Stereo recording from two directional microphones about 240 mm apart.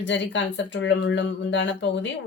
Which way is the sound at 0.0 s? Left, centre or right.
Left.